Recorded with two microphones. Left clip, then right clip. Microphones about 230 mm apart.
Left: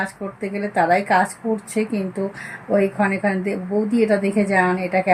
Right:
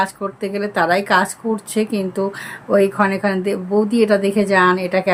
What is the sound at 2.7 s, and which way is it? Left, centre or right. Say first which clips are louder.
A woman's voice: right 4 dB; centre.